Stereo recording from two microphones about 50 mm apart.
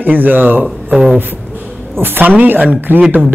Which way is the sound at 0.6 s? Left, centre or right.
Centre.